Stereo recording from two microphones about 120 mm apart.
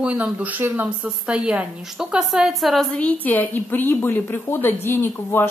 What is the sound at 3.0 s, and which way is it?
A woman's voice, 15° left (ahead or behind).